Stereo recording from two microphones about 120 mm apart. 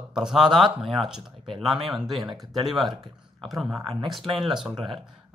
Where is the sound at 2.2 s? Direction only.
35° right (ahead or behind).